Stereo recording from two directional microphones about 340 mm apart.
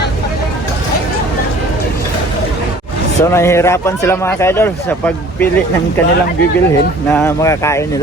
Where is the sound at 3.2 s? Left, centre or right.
Centre.